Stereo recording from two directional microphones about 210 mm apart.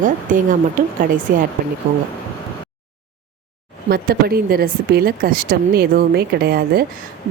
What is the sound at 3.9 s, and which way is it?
Speech, 45° right (ahead or behind).